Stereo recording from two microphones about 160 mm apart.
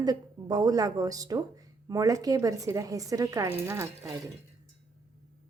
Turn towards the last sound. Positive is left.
turn(degrees=-20)  # may be behind; listen again after turning